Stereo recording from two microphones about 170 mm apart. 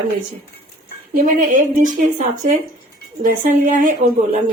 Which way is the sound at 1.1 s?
50° right (ahead or behind).